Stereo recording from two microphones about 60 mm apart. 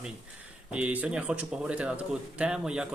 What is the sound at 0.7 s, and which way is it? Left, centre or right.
Speech, right.